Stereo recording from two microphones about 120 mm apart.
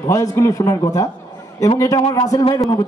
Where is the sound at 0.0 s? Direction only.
30° left (ahead or behind).